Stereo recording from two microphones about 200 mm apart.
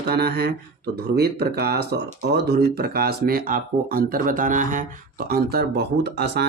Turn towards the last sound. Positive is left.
turn(degrees=-55)  # may be behind; listen again after turning